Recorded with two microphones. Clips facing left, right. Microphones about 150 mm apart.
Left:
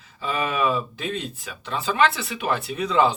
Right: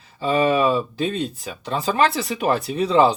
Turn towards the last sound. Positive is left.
turn(degrees=-35)  # may be behind; listen again after turning